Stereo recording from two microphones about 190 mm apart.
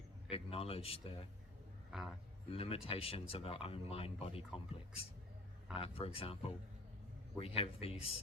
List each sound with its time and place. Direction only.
0.3 s speech: 30° left (ahead or behind)
1.9 s a man's voice: 5° right (ahead or behind)
2.5 s speech: 30° left (ahead or behind)